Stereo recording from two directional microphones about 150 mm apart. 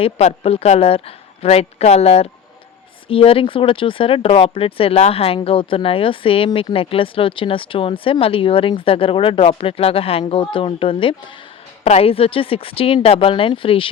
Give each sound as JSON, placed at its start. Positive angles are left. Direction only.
{"t": 0.0, "sound": "a woman's voice", "side_deg": 40}